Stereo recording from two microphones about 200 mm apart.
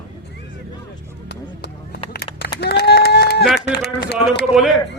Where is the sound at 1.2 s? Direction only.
55° left (ahead or behind).